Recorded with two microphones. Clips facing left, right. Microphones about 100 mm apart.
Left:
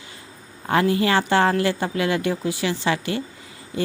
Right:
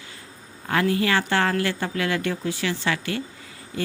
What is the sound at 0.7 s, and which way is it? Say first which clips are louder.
Speech: left 3 dB; 25° left (ahead or behind).